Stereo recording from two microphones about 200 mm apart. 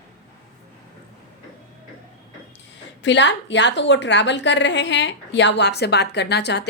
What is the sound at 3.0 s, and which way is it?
A woman's voice, 65° left (ahead or behind).